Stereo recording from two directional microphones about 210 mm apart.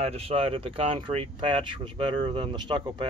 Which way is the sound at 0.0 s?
30° right (ahead or behind).